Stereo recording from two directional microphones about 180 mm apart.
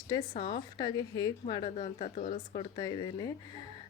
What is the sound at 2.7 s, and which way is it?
Speech, 20° left (ahead or behind).